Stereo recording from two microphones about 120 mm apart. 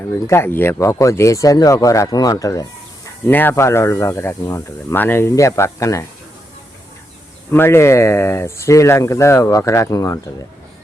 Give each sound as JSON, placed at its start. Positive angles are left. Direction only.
{"t": 0.1, "sound": "speech", "side_deg": 20}
{"t": 3.2, "sound": "speech", "side_deg": 15}
{"t": 7.5, "sound": "speech", "side_deg": 20}